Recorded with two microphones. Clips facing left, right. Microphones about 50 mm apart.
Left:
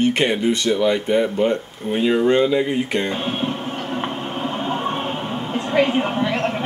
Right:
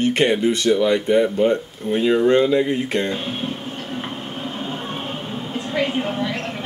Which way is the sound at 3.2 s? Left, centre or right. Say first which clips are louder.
Left 3 dB; left.